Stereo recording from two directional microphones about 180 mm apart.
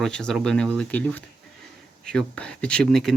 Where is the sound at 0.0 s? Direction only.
5° left (ahead or behind).